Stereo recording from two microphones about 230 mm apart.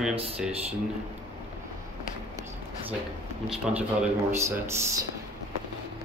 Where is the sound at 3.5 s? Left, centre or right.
Centre.